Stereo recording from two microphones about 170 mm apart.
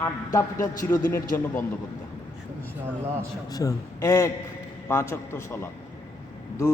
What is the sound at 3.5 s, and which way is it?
A man's voice, 20° left (ahead or behind).